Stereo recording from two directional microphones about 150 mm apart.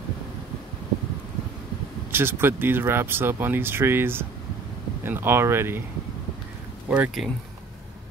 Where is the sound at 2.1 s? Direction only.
15° right (ahead or behind).